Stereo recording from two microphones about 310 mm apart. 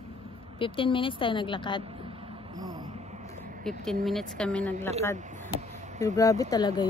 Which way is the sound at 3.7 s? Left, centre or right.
Centre.